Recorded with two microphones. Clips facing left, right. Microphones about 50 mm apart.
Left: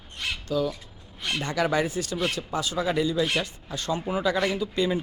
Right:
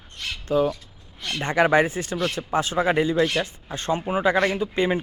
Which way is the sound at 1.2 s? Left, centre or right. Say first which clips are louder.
Even; centre.